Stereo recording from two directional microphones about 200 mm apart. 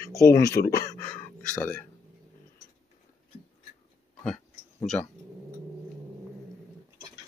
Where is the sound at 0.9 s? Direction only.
10° left (ahead or behind).